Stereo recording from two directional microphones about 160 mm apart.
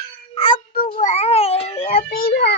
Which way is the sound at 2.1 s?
70° left (ahead or behind).